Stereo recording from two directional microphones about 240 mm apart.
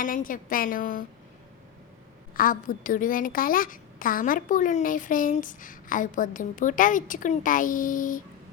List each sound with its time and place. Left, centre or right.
0.0 s a woman's voice: left
2.3 s a woman's voice: left